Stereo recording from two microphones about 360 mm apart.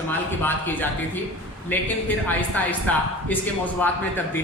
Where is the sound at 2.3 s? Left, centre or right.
Centre.